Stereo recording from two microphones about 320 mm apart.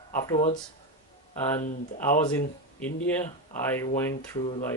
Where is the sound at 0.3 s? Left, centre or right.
Centre.